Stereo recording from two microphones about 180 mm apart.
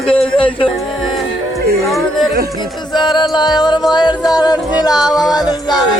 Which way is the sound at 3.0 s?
25° left (ahead or behind).